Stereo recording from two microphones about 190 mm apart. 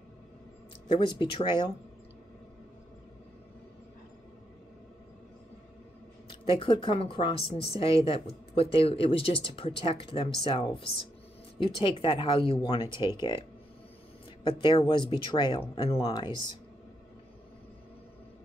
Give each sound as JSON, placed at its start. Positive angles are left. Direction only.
{"t": 1.0, "sound": "speech", "side_deg": 25}
{"t": 6.2, "sound": "speech", "side_deg": 25}
{"t": 14.5, "sound": "speech", "side_deg": 25}